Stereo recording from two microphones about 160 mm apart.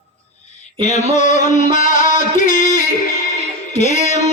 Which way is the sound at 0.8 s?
45° left (ahead or behind).